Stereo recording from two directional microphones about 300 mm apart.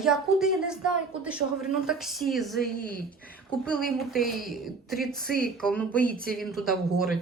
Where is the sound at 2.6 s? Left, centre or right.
Left.